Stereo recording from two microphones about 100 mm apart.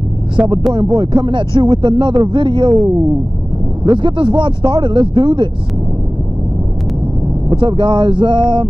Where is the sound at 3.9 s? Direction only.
55° right (ahead or behind).